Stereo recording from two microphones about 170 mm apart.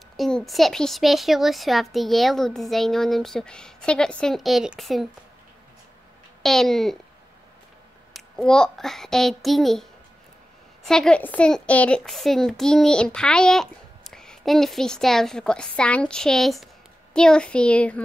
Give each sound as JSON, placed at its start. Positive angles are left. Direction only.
{"t": 0.2, "sound": "a woman's voice", "side_deg": 0}
{"t": 6.4, "sound": "a woman's voice", "side_deg": 0}
{"t": 8.1, "sound": "a woman's voice", "side_deg": 0}